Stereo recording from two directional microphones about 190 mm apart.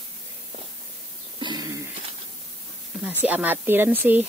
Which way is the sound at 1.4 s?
20° right (ahead or behind).